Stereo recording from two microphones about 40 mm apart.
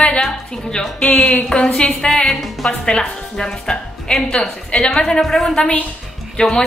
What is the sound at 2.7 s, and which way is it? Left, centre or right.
Speech, left.